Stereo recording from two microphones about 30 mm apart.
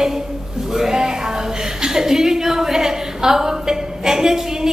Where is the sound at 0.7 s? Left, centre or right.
Centre.